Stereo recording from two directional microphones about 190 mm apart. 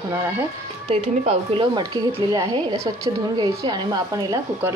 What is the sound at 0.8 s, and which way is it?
A woman's voice, 35° right (ahead or behind).